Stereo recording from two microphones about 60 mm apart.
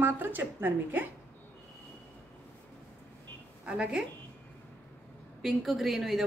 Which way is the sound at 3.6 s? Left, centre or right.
Centre.